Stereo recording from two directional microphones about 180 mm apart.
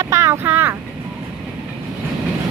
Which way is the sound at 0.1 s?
15° right (ahead or behind).